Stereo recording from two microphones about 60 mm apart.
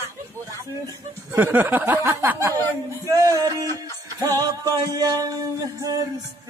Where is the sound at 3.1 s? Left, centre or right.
Right.